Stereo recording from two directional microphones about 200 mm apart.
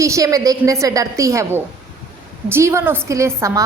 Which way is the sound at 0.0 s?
15° right (ahead or behind).